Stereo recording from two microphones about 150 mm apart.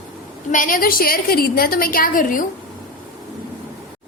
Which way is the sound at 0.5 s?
65° left (ahead or behind).